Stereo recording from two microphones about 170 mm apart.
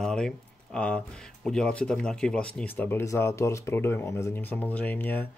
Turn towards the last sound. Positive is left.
turn(degrees=10)  # may be behind; listen again after turning